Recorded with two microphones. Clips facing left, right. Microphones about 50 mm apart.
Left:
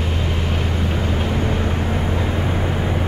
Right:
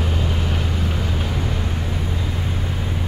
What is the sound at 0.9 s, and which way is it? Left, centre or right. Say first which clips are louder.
Vehicle: left 4 dB; left.